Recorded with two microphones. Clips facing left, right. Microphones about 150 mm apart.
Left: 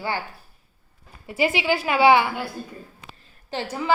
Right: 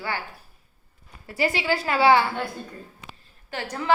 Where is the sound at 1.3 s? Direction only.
20° left (ahead or behind).